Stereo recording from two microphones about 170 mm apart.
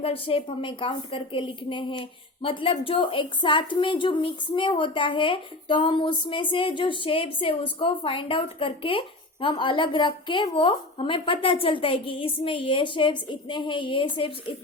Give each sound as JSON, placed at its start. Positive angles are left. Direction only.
{"t": 0.0, "sound": "a woman's voice", "side_deg": 35}